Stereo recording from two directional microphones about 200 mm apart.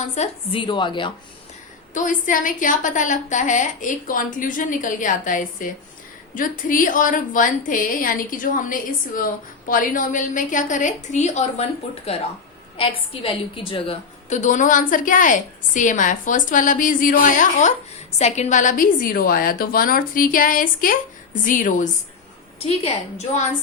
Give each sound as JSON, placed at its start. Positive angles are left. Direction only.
{"t": 0.0, "sound": "a woman's voice", "side_deg": 30}
{"t": 1.9, "sound": "a woman's voice", "side_deg": 40}